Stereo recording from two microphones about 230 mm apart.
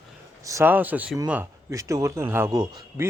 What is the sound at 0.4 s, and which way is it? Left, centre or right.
Speech, centre.